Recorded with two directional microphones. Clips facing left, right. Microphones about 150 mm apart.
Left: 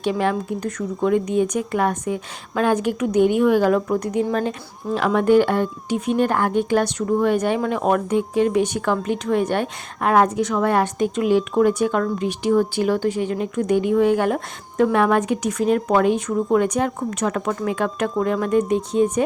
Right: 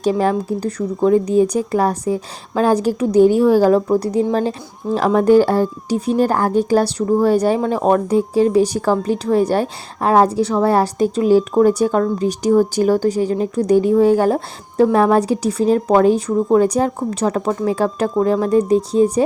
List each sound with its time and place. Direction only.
0.0 s speech: 40° right (ahead or behind)